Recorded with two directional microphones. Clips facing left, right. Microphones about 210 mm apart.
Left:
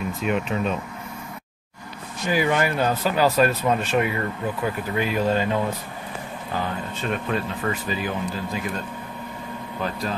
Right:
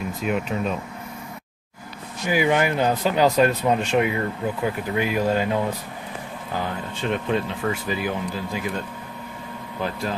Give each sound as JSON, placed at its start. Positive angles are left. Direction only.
{"t": 0.2, "sound": "speech", "side_deg": 0}
{"t": 2.2, "sound": "speech", "side_deg": -15}
{"t": 7.0, "sound": "speech", "side_deg": -20}